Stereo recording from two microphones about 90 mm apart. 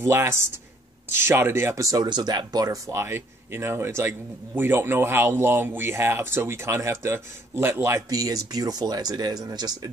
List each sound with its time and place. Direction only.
0.0 s speech: 30° right (ahead or behind)
2.0 s speech: 55° right (ahead or behind); by 8.0 s 25° right (ahead or behind)
8.1 s speech: 40° right (ahead or behind)